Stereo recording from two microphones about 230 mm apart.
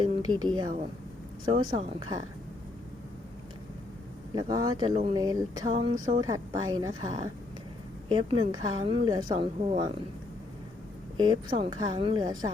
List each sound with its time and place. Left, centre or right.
0.3 s a woman's voice: centre
4.4 s a woman's voice: centre
11.5 s a woman's voice: centre